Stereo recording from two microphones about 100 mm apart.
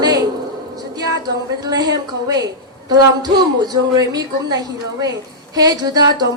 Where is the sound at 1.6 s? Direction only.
40° right (ahead or behind).